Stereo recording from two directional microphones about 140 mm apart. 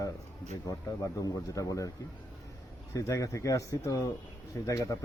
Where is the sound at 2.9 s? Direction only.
25° left (ahead or behind).